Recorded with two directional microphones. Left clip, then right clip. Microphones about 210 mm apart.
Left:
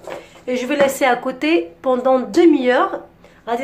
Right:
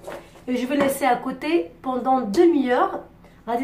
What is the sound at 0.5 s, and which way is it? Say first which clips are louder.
A woman's voice: left 5 dB; 45° left (ahead or behind).